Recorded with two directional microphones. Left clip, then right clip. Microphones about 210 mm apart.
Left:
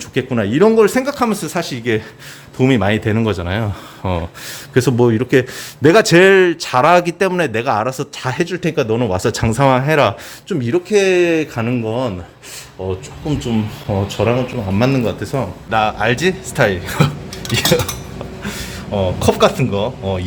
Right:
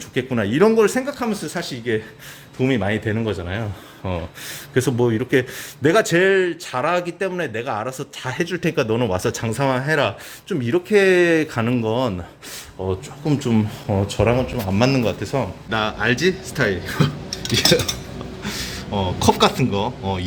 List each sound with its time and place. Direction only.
0.1 s a man's voice: 10° left (ahead or behind)
8.4 s speech: centre (ahead or behind); by 10.2 s 15° left (ahead or behind)
10.5 s speech: centre (ahead or behind)
13.2 s speech: 25° right (ahead or behind)
13.8 s speech: 10° right (ahead or behind); by 17.1 s 15° left (ahead or behind)
18.9 s speech: centre (ahead or behind)